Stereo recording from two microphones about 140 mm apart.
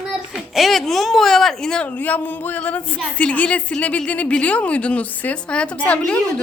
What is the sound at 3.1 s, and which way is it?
A woman's voice, 10° left (ahead or behind).